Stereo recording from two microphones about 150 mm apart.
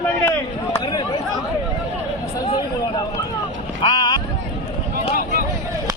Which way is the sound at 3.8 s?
30° left (ahead or behind).